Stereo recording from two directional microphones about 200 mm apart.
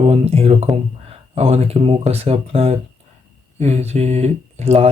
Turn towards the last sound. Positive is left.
turn(degrees=-30)  # may be behind; listen again after turning